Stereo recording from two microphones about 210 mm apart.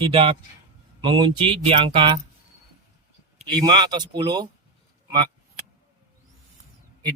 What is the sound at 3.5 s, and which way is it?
Speech, 20° right (ahead or behind).